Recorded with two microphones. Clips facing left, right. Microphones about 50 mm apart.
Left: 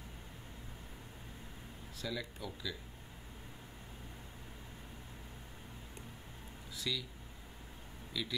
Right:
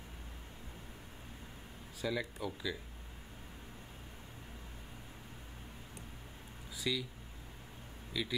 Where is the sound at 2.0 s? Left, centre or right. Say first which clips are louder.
Right 5 dB; centre.